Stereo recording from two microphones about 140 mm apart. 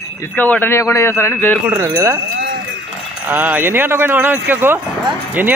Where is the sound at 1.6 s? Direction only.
20° right (ahead or behind).